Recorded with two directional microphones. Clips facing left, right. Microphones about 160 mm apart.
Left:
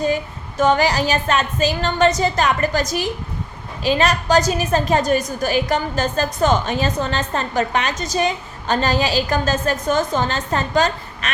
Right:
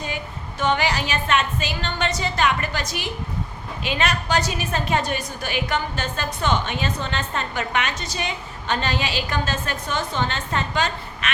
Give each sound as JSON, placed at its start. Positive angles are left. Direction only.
{"t": 0.6, "sound": "a woman's voice", "side_deg": 40}